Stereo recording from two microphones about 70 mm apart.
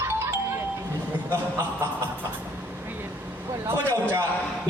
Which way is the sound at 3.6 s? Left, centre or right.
Right.